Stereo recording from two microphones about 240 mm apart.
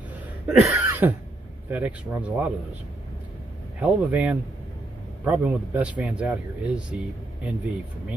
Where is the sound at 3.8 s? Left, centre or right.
Centre.